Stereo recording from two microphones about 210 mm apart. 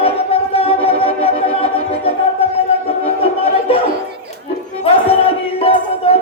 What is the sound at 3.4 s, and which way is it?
Music, 25° left (ahead or behind).